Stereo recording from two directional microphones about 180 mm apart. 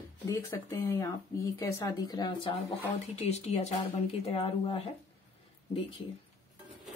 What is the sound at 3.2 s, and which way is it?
Speech, 35° left (ahead or behind).